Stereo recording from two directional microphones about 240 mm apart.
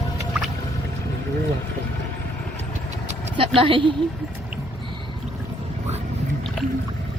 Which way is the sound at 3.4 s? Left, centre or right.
Right.